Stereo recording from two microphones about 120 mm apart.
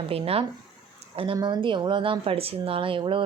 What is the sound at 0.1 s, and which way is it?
Speech, 55° right (ahead or behind).